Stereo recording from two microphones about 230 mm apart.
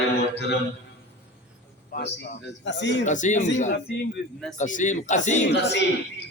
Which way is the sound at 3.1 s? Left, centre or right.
Left.